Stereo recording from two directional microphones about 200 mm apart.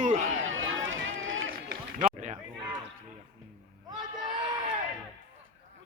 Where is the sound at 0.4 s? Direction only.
75° right (ahead or behind).